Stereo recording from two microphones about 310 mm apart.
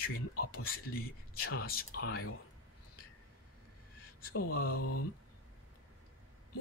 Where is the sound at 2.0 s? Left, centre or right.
Left.